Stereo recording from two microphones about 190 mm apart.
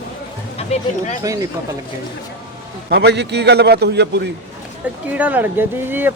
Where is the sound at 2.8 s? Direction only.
60° right (ahead or behind).